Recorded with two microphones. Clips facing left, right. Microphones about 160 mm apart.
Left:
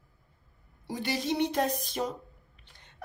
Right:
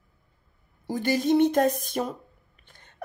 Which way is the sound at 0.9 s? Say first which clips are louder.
Right 8 dB; 50° right (ahead or behind).